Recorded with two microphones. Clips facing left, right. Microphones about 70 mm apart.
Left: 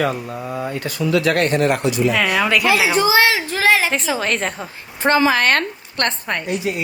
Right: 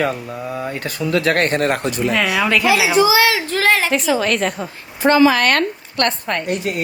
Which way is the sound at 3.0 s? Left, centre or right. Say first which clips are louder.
Right 2 dB; left.